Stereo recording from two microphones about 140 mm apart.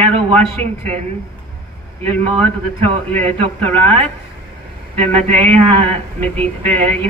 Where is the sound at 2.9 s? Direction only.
45° right (ahead or behind).